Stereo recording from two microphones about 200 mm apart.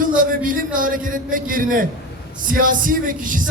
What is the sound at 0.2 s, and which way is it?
Speech, 45° right (ahead or behind).